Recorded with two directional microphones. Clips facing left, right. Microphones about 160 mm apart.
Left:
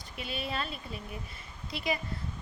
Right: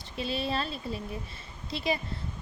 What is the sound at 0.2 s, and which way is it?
A woman's voice, 30° right (ahead or behind).